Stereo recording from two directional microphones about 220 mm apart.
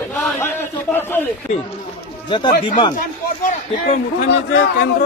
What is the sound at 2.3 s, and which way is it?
Speech, 20° left (ahead or behind).